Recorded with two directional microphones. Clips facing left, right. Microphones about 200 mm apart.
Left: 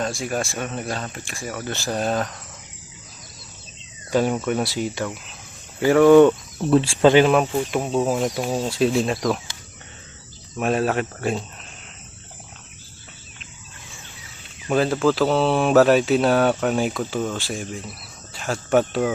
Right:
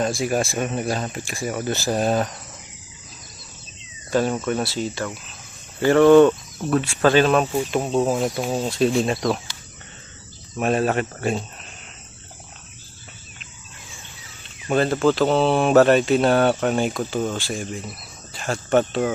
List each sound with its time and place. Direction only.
0.0 s speech: 10° right (ahead or behind)
4.1 s speech: 15° left (ahead or behind)
6.7 s speech: 30° left (ahead or behind)
7.0 s speech: 15° left (ahead or behind)
7.4 s speech: 5° right (ahead or behind)
10.6 s speech: centre (ahead or behind)
14.7 s speech: centre (ahead or behind)